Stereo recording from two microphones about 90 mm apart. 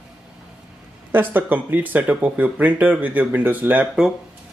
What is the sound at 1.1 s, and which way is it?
Speech, 20° right (ahead or behind).